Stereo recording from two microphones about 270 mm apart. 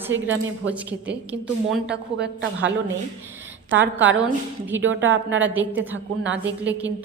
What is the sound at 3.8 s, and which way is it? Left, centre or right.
A woman's voice, centre.